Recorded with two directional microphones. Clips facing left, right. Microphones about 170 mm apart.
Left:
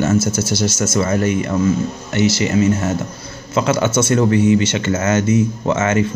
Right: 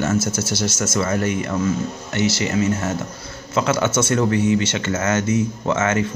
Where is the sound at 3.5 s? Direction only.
20° left (ahead or behind).